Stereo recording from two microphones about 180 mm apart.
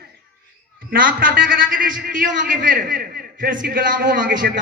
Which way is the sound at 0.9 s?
50° right (ahead or behind).